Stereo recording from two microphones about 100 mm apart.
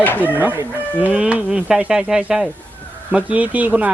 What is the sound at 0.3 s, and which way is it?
Speech, 20° right (ahead or behind).